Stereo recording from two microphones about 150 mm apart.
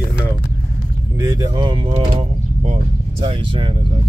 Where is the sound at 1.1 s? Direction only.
20° right (ahead or behind).